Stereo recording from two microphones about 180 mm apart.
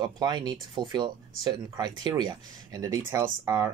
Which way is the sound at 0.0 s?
20° right (ahead or behind).